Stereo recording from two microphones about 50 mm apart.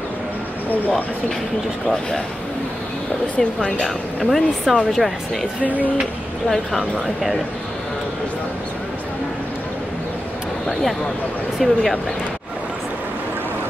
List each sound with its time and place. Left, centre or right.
0.7 s speech: left
1.9 s speech: centre
3.3 s speech: left
3.8 s speech: centre
10.7 s speech: centre